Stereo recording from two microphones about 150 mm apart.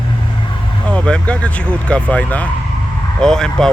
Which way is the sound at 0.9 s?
5° left (ahead or behind).